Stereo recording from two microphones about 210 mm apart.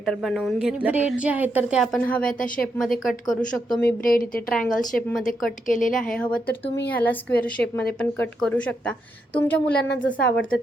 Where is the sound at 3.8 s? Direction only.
45° left (ahead or behind).